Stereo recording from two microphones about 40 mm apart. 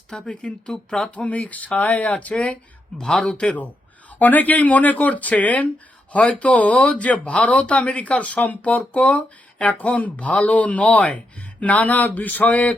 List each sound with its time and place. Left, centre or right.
0.1 s speech: left
0.7 s speech: centre
1.1 s speech: left
3.0 s speech: centre
3.3 s speech: left
4.2 s speech: left
11.6 s a sound: left